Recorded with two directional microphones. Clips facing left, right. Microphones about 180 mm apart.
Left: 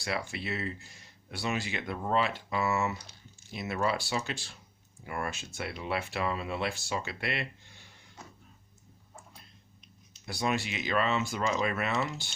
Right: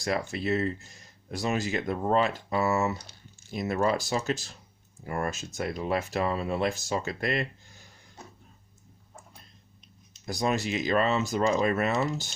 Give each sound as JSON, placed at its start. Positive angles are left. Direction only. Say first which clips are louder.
{"t": 0.0, "sound": "speech", "louder": "right 6 dB", "side_deg": -45}
{"t": 10.2, "sound": "speech", "louder": "right 4 dB", "side_deg": -40}